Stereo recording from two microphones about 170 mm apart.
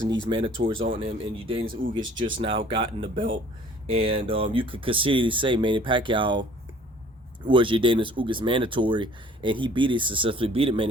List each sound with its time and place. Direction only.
0.3 s speech: 30° right (ahead or behind)
1.6 s speech: 55° right (ahead or behind)
1.9 s speech: 30° right (ahead or behind)
7.4 s speech: 30° right (ahead or behind)